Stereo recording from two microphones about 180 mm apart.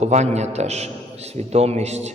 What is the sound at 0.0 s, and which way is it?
A man's voice, 40° right (ahead or behind).